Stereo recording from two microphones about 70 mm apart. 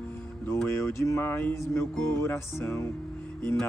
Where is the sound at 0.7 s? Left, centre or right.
Left.